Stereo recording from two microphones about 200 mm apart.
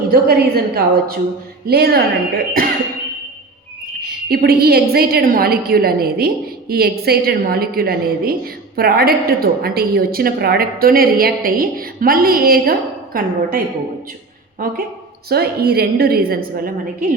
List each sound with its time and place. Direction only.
0.1 s a woman's voice: 50° right (ahead or behind)
4.3 s a woman's voice: 50° right (ahead or behind)
14.6 s a woman's voice: 45° right (ahead or behind)